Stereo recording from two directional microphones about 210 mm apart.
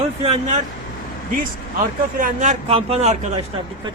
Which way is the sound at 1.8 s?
40° right (ahead or behind).